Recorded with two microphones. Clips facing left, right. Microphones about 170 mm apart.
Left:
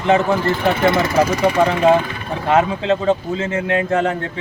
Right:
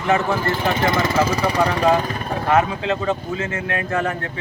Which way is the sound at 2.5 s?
25° left (ahead or behind).